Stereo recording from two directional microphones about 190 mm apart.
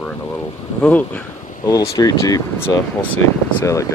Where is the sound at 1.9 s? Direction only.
20° left (ahead or behind).